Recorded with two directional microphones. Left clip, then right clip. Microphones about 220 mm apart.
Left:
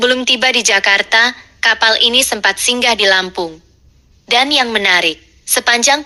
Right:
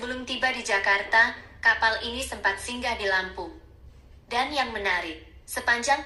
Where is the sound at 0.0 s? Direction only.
40° left (ahead or behind).